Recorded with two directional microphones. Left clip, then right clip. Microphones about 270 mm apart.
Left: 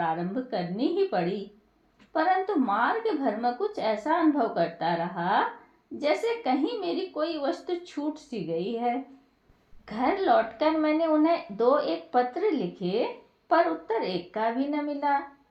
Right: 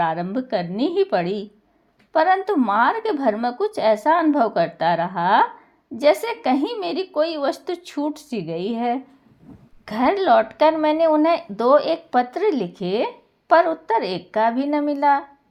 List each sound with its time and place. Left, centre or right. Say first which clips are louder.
0.0 s a woman's voice: right 7 dB; right